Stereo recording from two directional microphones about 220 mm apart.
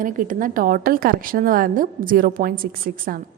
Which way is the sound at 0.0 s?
40° right (ahead or behind).